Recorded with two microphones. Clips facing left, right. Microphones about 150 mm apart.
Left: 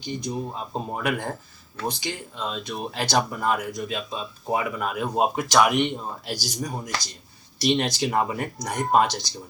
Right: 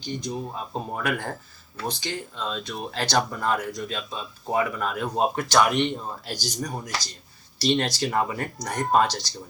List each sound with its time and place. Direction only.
0.0 s speech: 10° left (ahead or behind)